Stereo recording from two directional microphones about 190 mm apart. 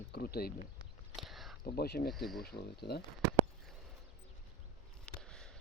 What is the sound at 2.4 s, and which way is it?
Speech, 55° left (ahead or behind).